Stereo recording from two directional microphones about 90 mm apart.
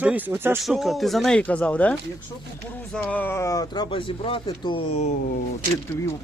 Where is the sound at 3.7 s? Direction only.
65° left (ahead or behind).